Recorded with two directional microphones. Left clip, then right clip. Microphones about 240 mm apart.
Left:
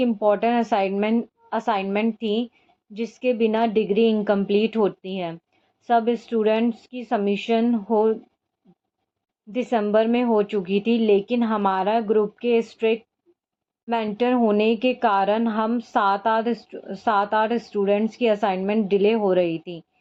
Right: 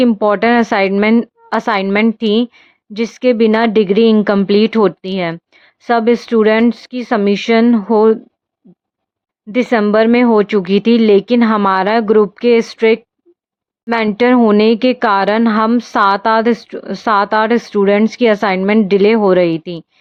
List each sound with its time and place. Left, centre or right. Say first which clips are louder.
0.0 s speech: right 8 dB; right
9.5 s speech: right 9 dB; right